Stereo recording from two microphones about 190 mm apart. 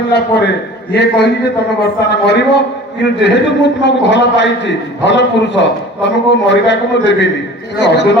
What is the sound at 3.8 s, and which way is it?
A man's voice, 70° left (ahead or behind).